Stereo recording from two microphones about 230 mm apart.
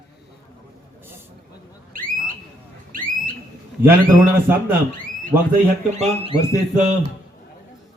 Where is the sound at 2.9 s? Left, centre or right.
Right.